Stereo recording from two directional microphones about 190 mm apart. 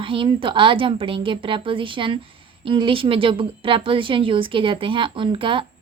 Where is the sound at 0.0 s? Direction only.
25° right (ahead or behind).